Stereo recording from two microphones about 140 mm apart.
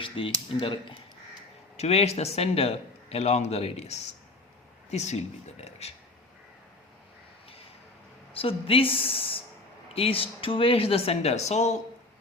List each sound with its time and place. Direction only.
0.0 s a woman's voice: 35° left (ahead or behind)
1.7 s a man's voice: 50° left (ahead or behind)
8.3 s a woman's voice: 40° left (ahead or behind)